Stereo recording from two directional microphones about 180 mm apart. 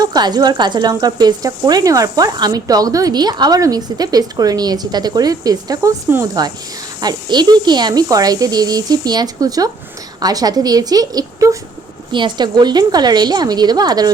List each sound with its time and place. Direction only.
0.0 s speech: 20° right (ahead or behind)